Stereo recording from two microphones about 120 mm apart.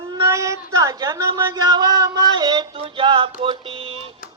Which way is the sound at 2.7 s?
50° right (ahead or behind).